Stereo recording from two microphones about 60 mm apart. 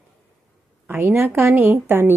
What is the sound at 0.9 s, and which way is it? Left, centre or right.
Speech, right.